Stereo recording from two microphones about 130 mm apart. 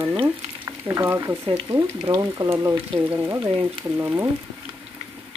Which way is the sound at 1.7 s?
30° right (ahead or behind).